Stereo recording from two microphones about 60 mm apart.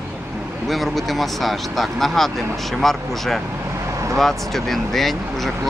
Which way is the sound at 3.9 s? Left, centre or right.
Right.